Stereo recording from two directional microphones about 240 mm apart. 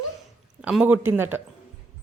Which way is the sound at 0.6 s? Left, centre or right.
Centre.